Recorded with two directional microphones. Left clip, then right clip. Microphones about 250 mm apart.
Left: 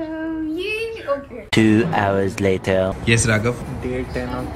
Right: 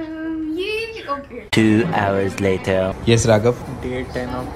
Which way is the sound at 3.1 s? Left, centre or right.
Centre.